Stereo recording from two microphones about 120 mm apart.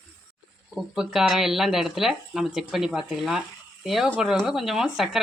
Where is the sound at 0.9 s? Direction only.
5° right (ahead or behind).